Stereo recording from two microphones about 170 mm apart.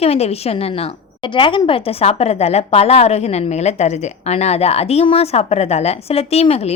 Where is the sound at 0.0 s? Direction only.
35° left (ahead or behind).